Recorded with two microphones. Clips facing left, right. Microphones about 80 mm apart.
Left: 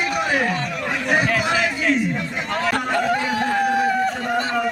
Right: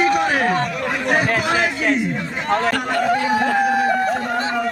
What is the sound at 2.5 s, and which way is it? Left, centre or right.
Run, right.